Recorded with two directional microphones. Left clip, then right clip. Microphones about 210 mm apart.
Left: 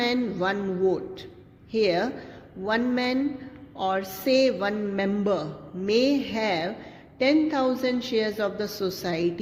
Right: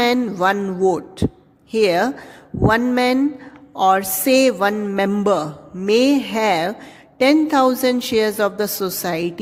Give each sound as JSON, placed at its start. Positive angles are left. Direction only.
{"t": 0.0, "sound": "music", "side_deg": -50}